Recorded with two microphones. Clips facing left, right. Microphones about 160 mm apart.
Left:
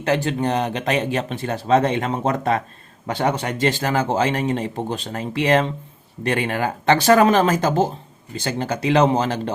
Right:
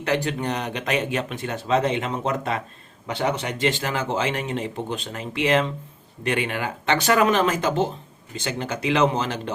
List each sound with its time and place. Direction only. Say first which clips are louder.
0.0 s speech: left 4 dB; 30° left (ahead or behind)